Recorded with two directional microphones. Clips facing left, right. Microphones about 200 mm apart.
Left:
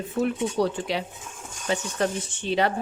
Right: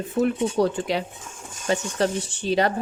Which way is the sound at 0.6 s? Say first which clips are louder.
Right 3 dB; 45° right (ahead or behind).